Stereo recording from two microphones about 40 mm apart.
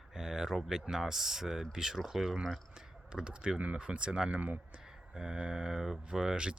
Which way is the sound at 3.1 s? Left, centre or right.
Right.